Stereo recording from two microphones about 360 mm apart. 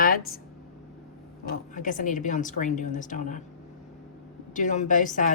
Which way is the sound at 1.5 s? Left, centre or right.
Left.